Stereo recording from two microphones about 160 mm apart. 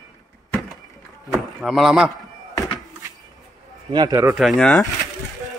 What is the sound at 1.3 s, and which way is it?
Speech, centre (ahead or behind).